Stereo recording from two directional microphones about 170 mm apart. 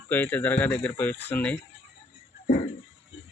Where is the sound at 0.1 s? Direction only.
10° left (ahead or behind).